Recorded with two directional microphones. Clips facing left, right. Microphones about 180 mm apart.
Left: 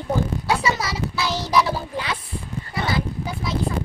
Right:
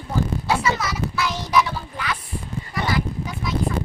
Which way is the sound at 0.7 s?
30° left (ahead or behind).